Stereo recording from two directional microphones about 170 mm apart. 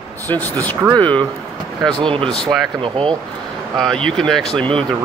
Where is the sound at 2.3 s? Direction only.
Centre (ahead or behind).